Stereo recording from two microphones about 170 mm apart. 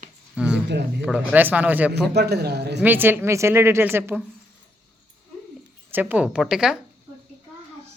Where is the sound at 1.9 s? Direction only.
75° right (ahead or behind).